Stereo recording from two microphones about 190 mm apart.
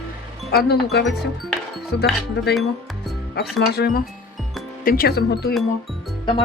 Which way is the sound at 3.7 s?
55° left (ahead or behind).